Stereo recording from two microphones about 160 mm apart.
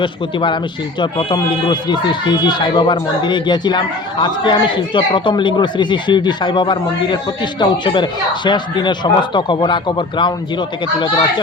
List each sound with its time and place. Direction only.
0.0 s speech: 30° left (ahead or behind)